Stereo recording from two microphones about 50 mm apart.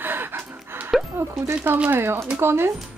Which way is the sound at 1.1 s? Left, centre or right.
Right.